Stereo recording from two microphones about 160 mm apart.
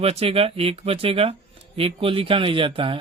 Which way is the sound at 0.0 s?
40° right (ahead or behind).